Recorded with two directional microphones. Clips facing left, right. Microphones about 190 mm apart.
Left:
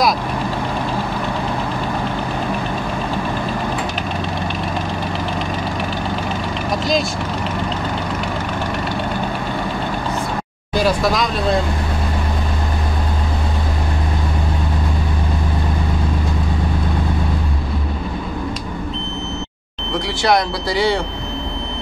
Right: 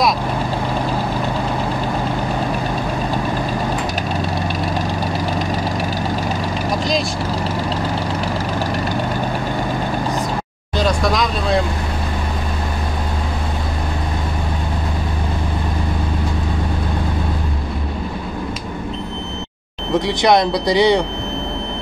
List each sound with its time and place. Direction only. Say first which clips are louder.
10.8 s vehicle: left 1 dB; 5° left (ahead or behind)
20.1 s speech: right 2 dB; 20° right (ahead or behind)